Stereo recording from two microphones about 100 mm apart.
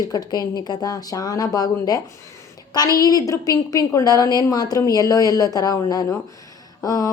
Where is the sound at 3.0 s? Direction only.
40° left (ahead or behind).